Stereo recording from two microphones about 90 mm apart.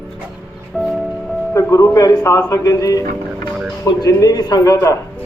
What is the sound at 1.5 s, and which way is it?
A man's voice, 35° left (ahead or behind).